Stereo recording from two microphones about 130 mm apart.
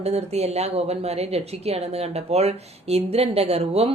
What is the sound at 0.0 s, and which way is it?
A woman's voice, 55° right (ahead or behind).